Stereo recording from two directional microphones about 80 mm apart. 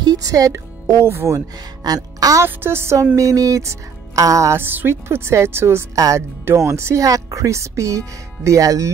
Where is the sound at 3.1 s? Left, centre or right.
Right.